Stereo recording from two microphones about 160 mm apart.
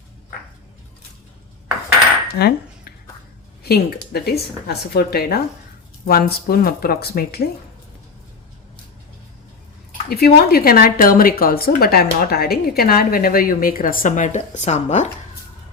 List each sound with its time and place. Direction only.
2.2 s cutlery: 80° left
3.6 s a woman's voice: 75° left (ahead or behind)
10.1 s speech: 70° left (ahead or behind); by 15.1 s 45° left (ahead or behind)